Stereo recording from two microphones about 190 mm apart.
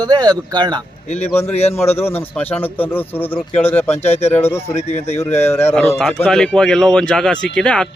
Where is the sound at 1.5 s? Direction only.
35° left (ahead or behind).